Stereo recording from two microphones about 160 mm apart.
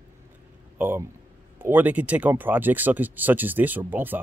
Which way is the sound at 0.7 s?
15° right (ahead or behind).